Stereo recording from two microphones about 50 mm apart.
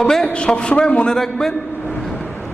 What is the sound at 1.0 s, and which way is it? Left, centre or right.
Speech, centre.